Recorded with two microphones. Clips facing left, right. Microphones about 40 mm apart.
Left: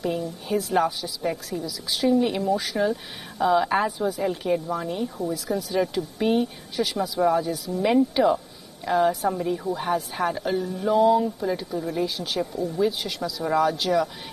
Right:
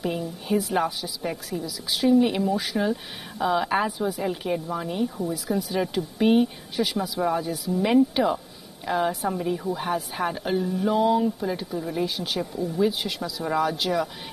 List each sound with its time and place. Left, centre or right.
0.0 s a woman's voice: centre